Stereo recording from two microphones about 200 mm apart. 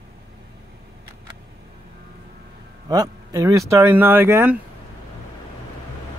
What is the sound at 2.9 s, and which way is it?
Speech, 15° right (ahead or behind).